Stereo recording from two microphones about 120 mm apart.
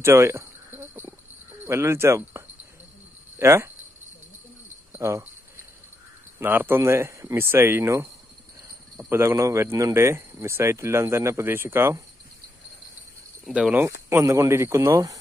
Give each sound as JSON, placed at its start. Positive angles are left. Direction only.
{"t": 0.0, "sound": "a sound", "side_deg": -20}
{"t": 1.7, "sound": "speech", "side_deg": -20}
{"t": 4.9, "sound": "speech", "side_deg": -25}
{"t": 6.4, "sound": "speech", "side_deg": -15}
{"t": 9.1, "sound": "speech", "side_deg": -20}
{"t": 13.5, "sound": "speech", "side_deg": -10}
{"t": 13.8, "sound": "speech", "side_deg": -25}